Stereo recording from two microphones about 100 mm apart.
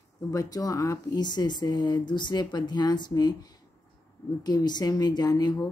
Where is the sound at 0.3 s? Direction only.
35° left (ahead or behind).